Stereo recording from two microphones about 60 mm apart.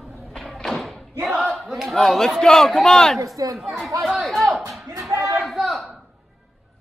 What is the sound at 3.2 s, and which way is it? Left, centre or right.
Speech, right.